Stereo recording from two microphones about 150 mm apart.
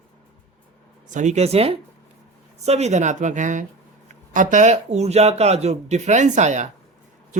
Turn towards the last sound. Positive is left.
turn(degrees=-50)  # may be behind; listen again after turning